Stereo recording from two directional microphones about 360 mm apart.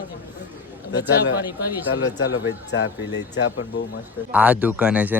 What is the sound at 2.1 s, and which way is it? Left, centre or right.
Speech, left.